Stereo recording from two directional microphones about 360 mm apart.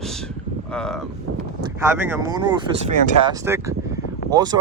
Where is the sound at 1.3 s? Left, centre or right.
Right.